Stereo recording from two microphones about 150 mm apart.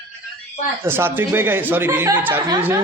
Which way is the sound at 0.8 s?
15° right (ahead or behind).